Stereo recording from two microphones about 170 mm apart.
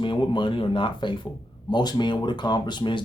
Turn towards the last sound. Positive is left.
turn(degrees=25)  # may be behind; listen again after turning